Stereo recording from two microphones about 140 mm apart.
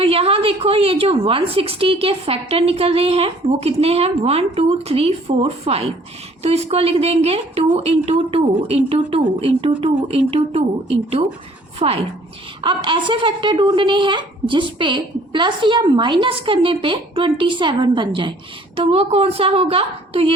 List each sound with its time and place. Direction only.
0.0 s a woman's voice: 45° right (ahead or behind)
12.6 s a woman's voice: 35° right (ahead or behind)